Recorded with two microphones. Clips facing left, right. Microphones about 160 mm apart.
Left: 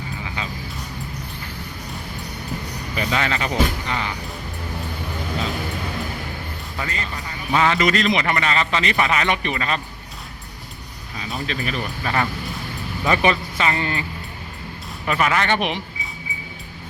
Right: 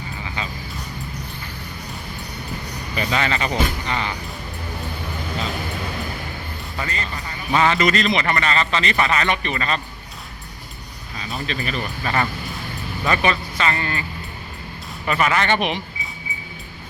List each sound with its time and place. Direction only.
0.4 s music: 5° left (ahead or behind)
2.9 s speech: centre (ahead or behind)
6.7 s a man's voice: 5° left (ahead or behind)
11.2 s speech: centre (ahead or behind)
13.1 s a man's voice: 15° left (ahead or behind)
15.0 s speech: centre (ahead or behind)